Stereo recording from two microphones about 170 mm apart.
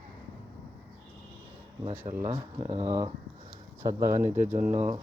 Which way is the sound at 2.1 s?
30° right (ahead or behind).